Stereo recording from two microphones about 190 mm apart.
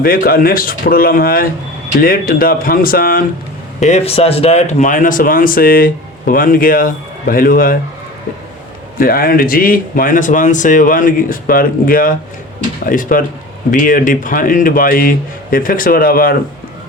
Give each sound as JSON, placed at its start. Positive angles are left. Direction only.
{"t": 0.0, "sound": "speech", "side_deg": 50}
{"t": 3.8, "sound": "speech", "side_deg": 35}
{"t": 9.0, "sound": "speech", "side_deg": 50}